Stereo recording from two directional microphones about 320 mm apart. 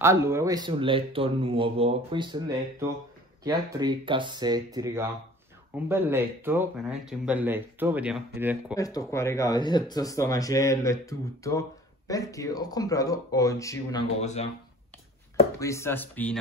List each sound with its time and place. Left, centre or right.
0.0 s speech: centre
8.7 s speech: centre
14.2 s speech: left
15.6 s speech: centre